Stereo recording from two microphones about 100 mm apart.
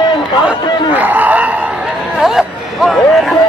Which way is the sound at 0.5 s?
15° right (ahead or behind).